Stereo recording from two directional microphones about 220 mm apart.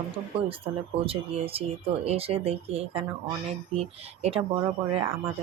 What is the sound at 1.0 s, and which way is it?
Speech, 25° right (ahead or behind).